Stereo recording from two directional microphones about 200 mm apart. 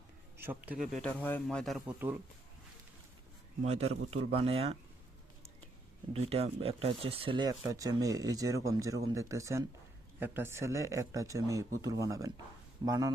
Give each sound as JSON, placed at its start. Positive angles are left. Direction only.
{"t": 0.3, "sound": "speech", "side_deg": -10}
{"t": 1.0, "sound": "speech", "side_deg": 5}
{"t": 3.6, "sound": "speech", "side_deg": -30}
{"t": 6.1, "sound": "speech", "side_deg": -30}